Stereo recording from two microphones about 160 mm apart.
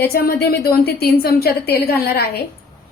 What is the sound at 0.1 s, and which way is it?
A woman's voice, 75° left (ahead or behind).